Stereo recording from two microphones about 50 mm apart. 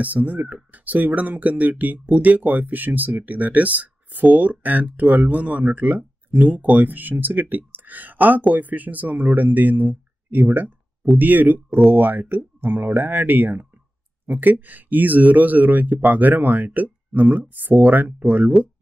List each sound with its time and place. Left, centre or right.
0.0 s speech: right